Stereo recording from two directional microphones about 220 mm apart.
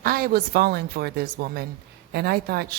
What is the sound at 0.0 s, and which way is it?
A woman's voice, 45° right (ahead or behind).